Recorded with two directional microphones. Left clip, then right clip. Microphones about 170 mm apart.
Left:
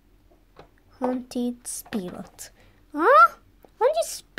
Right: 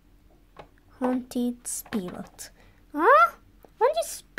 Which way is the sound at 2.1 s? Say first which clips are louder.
Left 1 dB; 5° left (ahead or behind).